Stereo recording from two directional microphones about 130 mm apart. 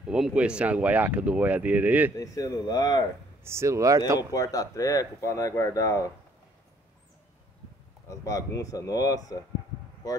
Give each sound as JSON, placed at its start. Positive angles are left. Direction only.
{"t": 0.0, "sound": "speech", "side_deg": -5}
{"t": 2.1, "sound": "speech", "side_deg": 25}
{"t": 3.4, "sound": "speech", "side_deg": -20}
{"t": 4.3, "sound": "speech", "side_deg": 30}
{"t": 8.1, "sound": "speech", "side_deg": 25}